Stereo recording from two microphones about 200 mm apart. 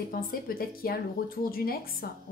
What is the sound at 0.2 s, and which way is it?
A woman's voice, 45° left (ahead or behind).